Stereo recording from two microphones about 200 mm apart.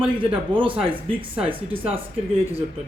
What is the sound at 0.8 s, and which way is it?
Speech, 25° right (ahead or behind).